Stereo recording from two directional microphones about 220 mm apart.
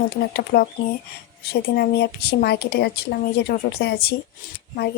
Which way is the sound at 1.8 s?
45° left (ahead or behind).